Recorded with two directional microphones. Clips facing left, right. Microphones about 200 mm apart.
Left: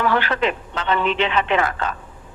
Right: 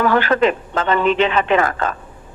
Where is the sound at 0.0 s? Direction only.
45° right (ahead or behind).